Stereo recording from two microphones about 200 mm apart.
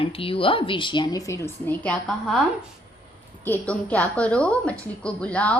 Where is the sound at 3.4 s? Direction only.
10° left (ahead or behind).